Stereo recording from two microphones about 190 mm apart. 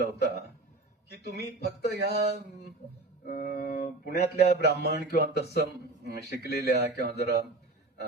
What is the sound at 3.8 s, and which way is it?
Speech, 55° left (ahead or behind).